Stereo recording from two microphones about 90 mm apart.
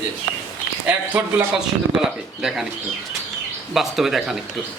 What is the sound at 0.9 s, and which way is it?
Speech, 20° right (ahead or behind).